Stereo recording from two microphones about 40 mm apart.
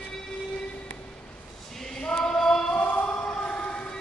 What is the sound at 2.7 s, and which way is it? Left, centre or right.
Music, left.